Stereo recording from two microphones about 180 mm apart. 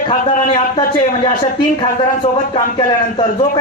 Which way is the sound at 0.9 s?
25° left (ahead or behind).